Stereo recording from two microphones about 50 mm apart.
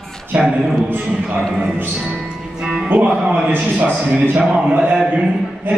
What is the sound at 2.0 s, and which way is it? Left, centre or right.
Music, centre.